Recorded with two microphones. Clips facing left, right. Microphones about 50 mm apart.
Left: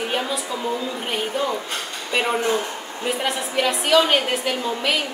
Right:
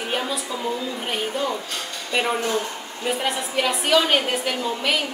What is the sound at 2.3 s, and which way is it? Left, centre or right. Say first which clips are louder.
Speech: left 2 dB; centre.